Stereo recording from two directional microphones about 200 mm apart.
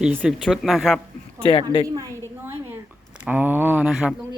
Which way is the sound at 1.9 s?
15° right (ahead or behind).